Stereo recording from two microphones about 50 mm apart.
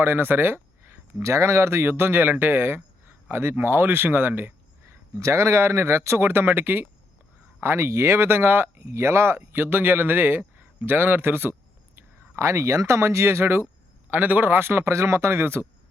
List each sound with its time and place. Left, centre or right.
0.0 s speech: right
1.2 s speech: right
5.1 s a man's voice: right
7.6 s speech: right
8.9 s a man's voice: right
9.4 s speech: right
12.4 s speech: right
14.1 s a man's voice: right
14.6 s a man's voice: right
14.9 s a man's voice: right